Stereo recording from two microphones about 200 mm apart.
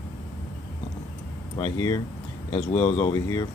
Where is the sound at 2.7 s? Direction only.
20° left (ahead or behind).